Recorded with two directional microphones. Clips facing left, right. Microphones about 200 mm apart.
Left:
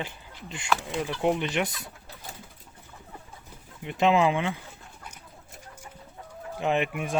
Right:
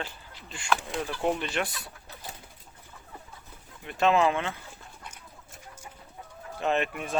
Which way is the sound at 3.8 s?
15° left (ahead or behind).